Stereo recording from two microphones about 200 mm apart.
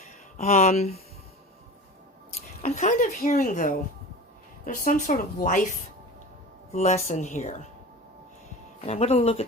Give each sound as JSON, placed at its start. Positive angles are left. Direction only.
{"t": 0.3, "sound": "a woman's voice", "side_deg": 35}
{"t": 2.6, "sound": "a woman's voice", "side_deg": 40}
{"t": 8.9, "sound": "a woman's voice", "side_deg": 30}